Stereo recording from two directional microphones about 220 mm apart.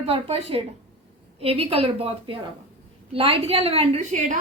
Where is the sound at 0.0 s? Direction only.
25° right (ahead or behind).